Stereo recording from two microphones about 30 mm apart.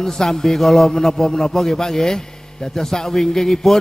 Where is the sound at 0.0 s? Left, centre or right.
Centre.